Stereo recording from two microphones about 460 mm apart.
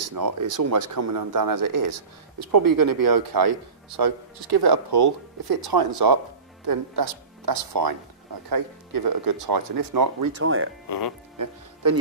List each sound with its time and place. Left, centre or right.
0.0 s speech: right
10.3 s speech: right
10.9 s speech: left
11.3 s music: right